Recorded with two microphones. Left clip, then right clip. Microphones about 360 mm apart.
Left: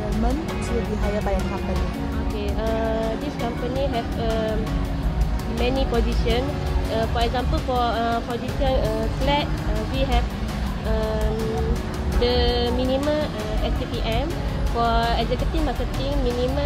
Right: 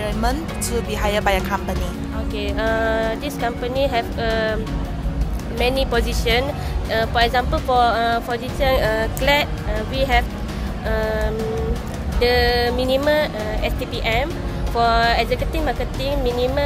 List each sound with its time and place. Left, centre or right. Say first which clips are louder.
3.9 s speech: right 4 dB; right
5.6 s speech: right 4 dB; right
12.2 s speech: right 5 dB; right
14.8 s speech: right 5 dB; right